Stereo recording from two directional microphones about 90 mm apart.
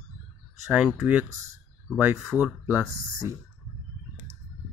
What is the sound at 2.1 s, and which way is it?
Speech, 5° right (ahead or behind).